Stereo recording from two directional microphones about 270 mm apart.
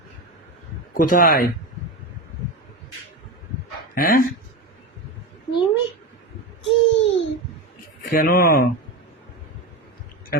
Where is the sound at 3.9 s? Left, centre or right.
Left.